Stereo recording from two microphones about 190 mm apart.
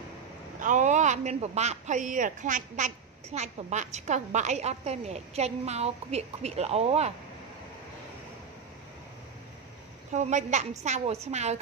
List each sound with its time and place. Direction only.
0.6 s speech: 40° right (ahead or behind)
10.1 s speech: 40° right (ahead or behind)